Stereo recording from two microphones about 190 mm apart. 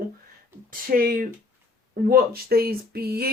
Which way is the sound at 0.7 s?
50° right (ahead or behind).